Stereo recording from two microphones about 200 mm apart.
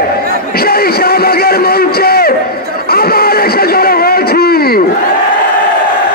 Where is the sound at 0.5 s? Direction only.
50° left (ahead or behind).